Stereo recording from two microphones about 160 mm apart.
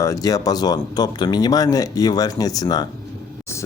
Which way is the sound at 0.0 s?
20° left (ahead or behind).